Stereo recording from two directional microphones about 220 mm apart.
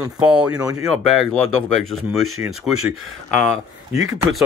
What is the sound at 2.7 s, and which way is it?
Speech, 80° right.